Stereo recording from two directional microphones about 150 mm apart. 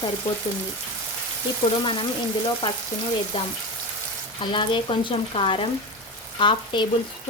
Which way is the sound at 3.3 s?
35° left (ahead or behind).